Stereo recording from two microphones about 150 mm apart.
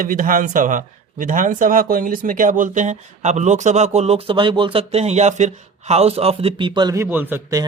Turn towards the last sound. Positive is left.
turn(degrees=-15)  # may be behind; listen again after turning